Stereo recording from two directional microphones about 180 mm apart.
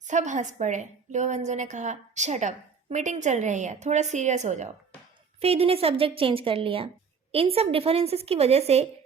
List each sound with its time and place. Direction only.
0.1 s a woman's voice: 40° right (ahead or behind)